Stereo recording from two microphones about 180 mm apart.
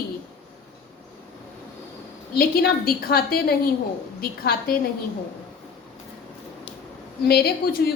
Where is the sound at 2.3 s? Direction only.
55° left (ahead or behind).